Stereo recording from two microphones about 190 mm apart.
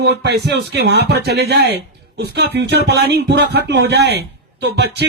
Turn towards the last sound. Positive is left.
turn(degrees=-60)  # may be behind; listen again after turning